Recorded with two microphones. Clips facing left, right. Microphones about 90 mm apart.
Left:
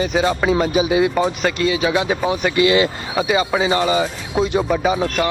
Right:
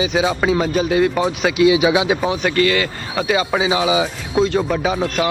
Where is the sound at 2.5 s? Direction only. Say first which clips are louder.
Left 4 dB; 20° left (ahead or behind).